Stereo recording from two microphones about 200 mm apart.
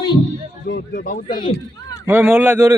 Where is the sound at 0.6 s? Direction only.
50° left (ahead or behind).